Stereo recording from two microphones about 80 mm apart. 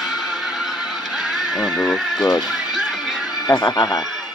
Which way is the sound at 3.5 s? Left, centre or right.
Left.